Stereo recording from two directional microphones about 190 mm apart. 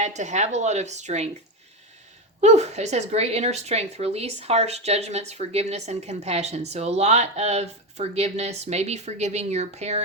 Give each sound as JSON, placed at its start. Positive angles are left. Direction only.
{"t": 0.0, "sound": "speech", "side_deg": -40}
{"t": 2.4, "sound": "speech", "side_deg": -35}